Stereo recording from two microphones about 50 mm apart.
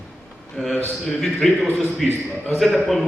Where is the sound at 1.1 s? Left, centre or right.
Centre.